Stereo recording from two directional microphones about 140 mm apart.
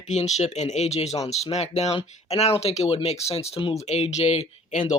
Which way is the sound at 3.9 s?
50° left (ahead or behind).